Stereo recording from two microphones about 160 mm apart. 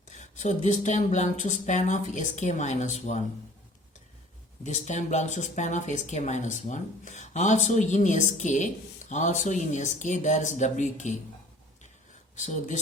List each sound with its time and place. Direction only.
0.1 s speech: 50° left (ahead or behind)
4.6 s speech: 50° left (ahead or behind)
12.4 s speech: 50° left (ahead or behind)